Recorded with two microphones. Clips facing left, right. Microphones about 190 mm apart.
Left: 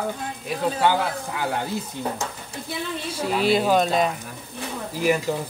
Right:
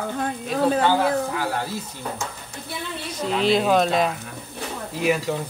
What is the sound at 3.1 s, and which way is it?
Speech, 5° left (ahead or behind).